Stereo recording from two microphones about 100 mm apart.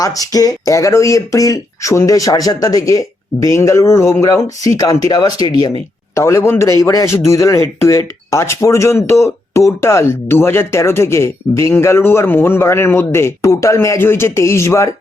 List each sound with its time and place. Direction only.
0.0 s speech: 35° left (ahead or behind)
6.1 s speech: 30° left (ahead or behind)